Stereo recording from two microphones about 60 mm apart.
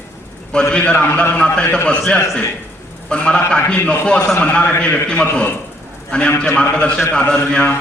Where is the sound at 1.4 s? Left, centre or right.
Centre.